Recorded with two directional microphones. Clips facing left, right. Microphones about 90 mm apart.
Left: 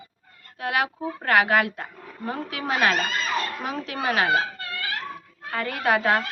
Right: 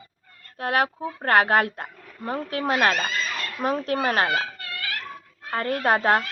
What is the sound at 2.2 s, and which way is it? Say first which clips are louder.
Speech: right 3 dB; 40° right (ahead or behind).